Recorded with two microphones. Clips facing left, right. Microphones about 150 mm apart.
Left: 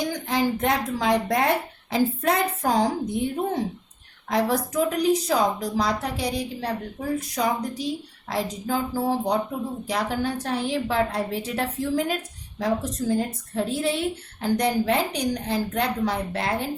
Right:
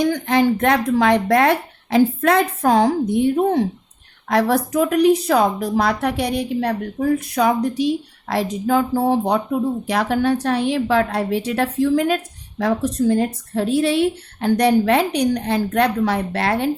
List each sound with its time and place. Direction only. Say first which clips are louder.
0.0 s a woman's voice: right 7 dB; 65° right (ahead or behind)